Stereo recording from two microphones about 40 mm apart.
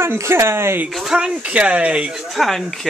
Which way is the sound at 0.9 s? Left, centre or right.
Centre.